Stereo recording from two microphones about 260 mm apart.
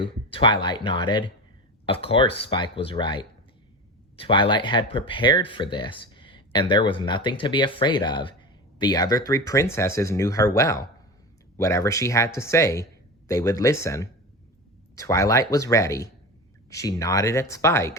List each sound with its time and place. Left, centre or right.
0.0 s speech: centre